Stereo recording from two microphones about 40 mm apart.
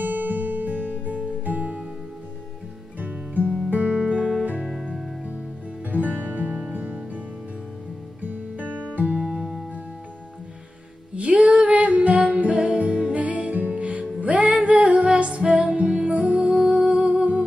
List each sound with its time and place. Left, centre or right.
0.0 s music: right
3.0 s music: right
3.7 s music: right
5.9 s music: right
8.2 s music: right
9.2 s music: centre
11.1 s music: right